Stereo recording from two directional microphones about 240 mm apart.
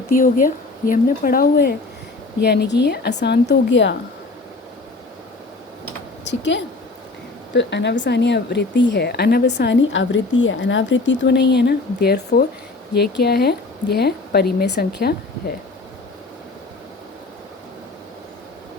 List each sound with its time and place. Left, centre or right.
0.1 s a woman's voice: left
6.2 s a woman's voice: left